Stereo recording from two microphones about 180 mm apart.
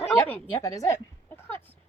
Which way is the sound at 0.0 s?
15° left (ahead or behind).